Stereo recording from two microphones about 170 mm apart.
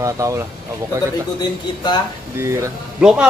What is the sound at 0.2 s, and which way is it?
Speech, 15° right (ahead or behind).